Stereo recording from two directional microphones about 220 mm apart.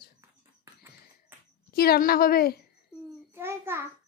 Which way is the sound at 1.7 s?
45° left (ahead or behind).